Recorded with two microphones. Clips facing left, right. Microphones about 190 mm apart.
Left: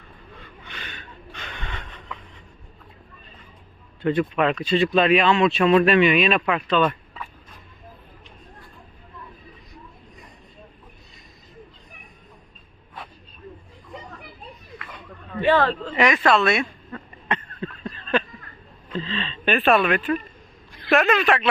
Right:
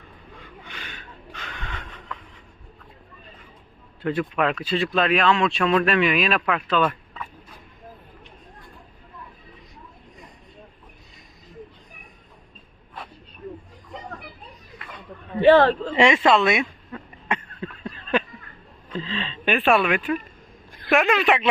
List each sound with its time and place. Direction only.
0.6 s snort: 10° right (ahead or behind)
4.0 s speech: 5° right (ahead or behind)
15.6 s throat clearing: 25° right (ahead or behind)
18.9 s speech: 10° right (ahead or behind)